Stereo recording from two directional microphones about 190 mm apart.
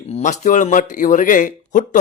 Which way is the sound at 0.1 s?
40° left (ahead or behind).